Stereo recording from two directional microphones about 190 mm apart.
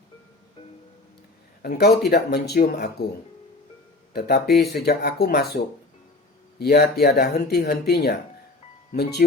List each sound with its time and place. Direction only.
1.6 s speech: 55° left (ahead or behind)
4.1 s speech: 55° left (ahead or behind)
6.6 s speech: 55° left (ahead or behind)